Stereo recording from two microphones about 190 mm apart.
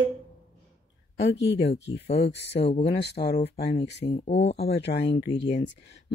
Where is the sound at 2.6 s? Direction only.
35° left (ahead or behind).